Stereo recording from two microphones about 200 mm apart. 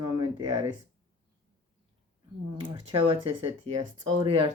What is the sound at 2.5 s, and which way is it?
Speech, 25° right (ahead or behind).